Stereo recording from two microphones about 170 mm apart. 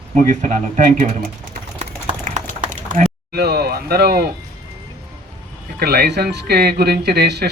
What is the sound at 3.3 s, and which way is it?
Speech, 70° right (ahead or behind).